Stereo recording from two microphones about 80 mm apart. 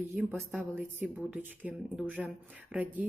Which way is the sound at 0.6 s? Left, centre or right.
Right.